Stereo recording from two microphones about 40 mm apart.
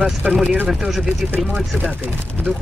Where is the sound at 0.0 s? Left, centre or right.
Right.